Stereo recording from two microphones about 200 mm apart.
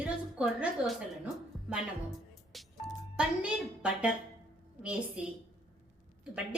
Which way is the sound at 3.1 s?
5° right (ahead or behind).